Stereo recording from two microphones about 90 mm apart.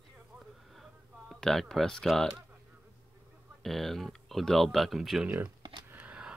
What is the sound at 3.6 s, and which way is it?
Speech, centre (ahead or behind).